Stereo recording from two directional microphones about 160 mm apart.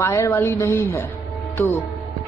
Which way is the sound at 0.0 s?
15° left (ahead or behind).